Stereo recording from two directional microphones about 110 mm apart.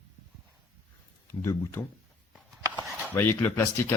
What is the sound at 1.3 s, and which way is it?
Speech, 25° left (ahead or behind).